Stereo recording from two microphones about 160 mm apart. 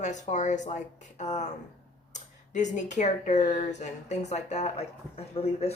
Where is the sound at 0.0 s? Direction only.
50° left (ahead or behind).